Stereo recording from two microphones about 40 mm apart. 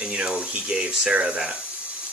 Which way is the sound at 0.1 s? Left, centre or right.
Right.